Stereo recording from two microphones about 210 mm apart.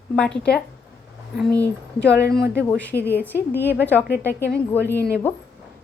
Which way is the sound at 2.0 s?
50° left (ahead or behind).